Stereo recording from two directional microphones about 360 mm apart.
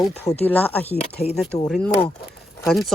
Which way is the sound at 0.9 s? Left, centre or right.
Centre.